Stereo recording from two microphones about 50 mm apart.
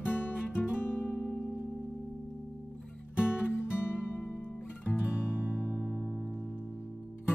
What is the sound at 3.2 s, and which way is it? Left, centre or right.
Music, left.